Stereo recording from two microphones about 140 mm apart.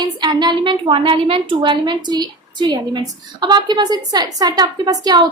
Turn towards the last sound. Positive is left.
turn(degrees=-30)  # may be behind; listen again after turning